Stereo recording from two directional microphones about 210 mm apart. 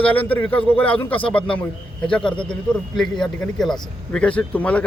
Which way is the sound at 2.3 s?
25° left (ahead or behind).